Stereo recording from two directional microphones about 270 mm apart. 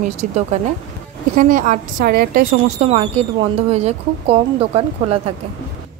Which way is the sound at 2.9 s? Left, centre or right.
Right.